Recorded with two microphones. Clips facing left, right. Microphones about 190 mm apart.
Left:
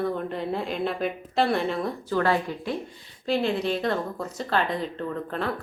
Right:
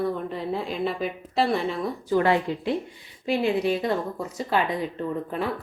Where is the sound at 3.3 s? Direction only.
10° right (ahead or behind).